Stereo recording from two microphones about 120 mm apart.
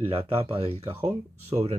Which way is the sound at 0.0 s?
55° right (ahead or behind).